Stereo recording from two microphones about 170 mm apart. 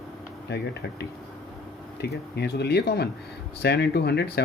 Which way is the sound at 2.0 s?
75° left (ahead or behind).